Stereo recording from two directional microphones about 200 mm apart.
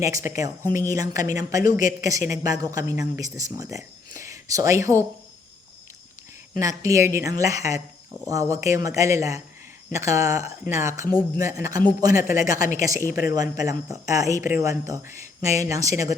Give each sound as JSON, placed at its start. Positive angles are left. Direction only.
{"t": 0.0, "sound": "a woman's voice", "side_deg": -15}
{"t": 6.5, "sound": "a woman's voice", "side_deg": -15}